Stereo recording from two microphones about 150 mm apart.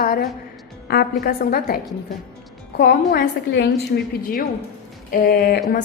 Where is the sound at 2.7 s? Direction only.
90° left.